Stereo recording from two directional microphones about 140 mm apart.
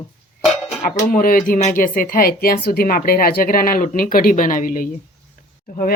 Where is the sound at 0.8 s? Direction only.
80° left.